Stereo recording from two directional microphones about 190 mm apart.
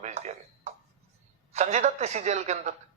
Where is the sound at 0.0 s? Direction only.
35° right (ahead or behind).